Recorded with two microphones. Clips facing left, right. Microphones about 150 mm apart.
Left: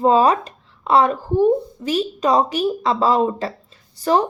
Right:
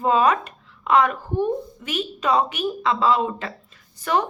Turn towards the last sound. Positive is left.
turn(degrees=35)  # may be behind; listen again after turning